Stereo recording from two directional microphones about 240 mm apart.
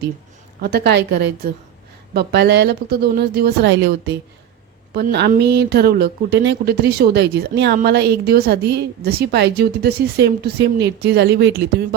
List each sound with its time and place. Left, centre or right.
0.6 s speech: right